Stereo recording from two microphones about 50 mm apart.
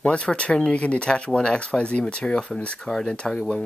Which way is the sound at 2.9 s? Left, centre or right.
Centre.